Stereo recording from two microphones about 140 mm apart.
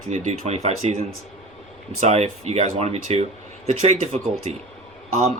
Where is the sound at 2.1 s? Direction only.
50° right (ahead or behind).